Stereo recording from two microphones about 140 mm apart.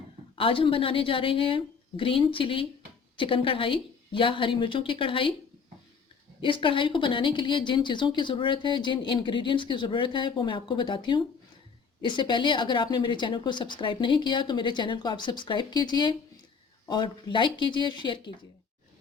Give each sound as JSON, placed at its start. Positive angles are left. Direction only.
{"t": 0.3, "sound": "speech", "side_deg": 40}
{"t": 6.4, "sound": "speech", "side_deg": 35}